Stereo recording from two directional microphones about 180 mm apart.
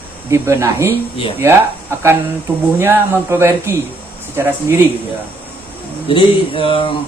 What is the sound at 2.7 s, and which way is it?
Speech, 15° right (ahead or behind).